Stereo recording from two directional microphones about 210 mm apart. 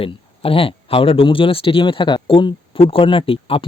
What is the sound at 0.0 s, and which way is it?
Speech, 25° left (ahead or behind).